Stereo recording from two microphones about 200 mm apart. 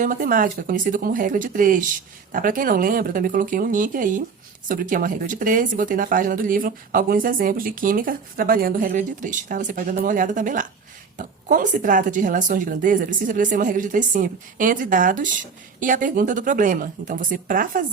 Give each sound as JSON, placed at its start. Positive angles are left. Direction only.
{"t": 0.0, "sound": "a woman's voice", "side_deg": -45}